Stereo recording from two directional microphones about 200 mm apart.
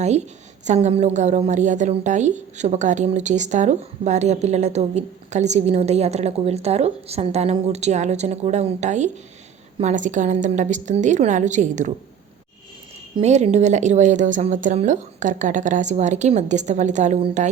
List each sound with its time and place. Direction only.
0.0 s a woman's voice: 35° right (ahead or behind)
13.1 s a woman's voice: 35° right (ahead or behind)